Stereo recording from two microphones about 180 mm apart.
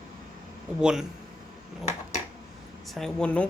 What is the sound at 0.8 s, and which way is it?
Speech, 5° right (ahead or behind).